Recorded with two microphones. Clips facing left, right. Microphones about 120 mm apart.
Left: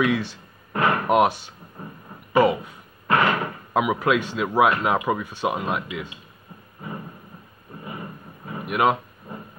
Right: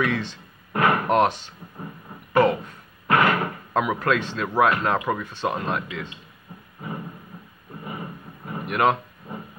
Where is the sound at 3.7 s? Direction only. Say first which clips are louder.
Left 2 dB; 10° left (ahead or behind).